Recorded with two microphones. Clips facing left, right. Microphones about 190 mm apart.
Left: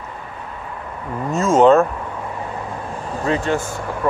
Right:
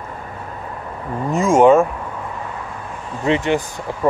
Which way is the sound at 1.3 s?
15° right (ahead or behind).